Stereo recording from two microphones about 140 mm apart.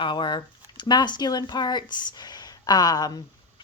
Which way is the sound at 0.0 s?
35° left (ahead or behind).